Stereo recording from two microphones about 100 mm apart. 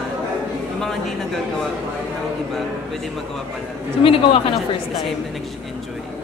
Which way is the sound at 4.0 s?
65° left (ahead or behind).